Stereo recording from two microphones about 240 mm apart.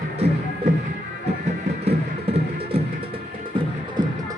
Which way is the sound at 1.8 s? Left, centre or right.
Right.